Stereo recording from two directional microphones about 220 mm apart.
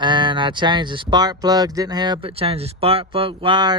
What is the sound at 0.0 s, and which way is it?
Speech, 20° right (ahead or behind).